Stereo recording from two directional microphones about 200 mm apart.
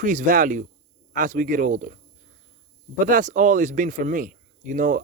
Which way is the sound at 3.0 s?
40° right (ahead or behind).